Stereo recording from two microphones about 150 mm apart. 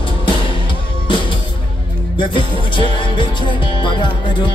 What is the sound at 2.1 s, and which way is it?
Music, 30° left (ahead or behind).